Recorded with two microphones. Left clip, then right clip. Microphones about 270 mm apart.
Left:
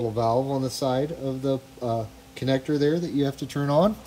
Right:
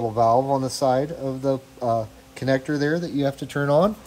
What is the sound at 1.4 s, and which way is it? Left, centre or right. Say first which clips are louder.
Speech: right 4 dB; right.